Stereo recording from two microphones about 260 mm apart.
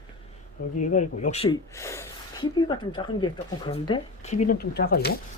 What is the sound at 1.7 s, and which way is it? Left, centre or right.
Speech, centre.